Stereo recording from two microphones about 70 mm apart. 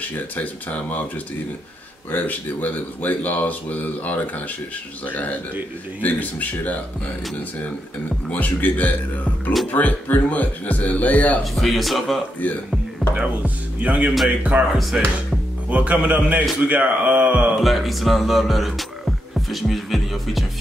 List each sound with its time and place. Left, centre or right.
0.0 s speech: left
2.0 s speech: left
8.3 s speech: left
11.5 s speech: centre
13.1 s speech: centre
17.6 s music: centre